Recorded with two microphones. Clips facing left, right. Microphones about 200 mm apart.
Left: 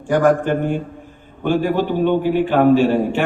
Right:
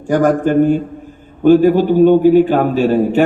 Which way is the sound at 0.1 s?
45° right (ahead or behind).